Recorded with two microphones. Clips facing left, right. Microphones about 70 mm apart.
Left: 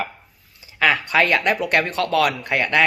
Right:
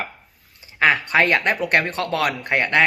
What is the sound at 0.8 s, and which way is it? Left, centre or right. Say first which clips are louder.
Speech: right 1 dB; right.